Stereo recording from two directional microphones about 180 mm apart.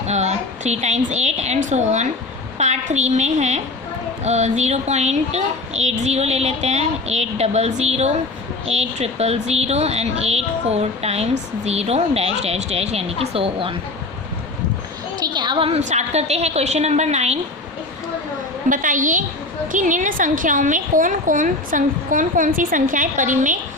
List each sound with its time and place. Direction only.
0.0 s a woman's voice: 40° right (ahead or behind)
15.2 s speech: 25° right (ahead or behind)
18.7 s a woman's voice: 45° right (ahead or behind)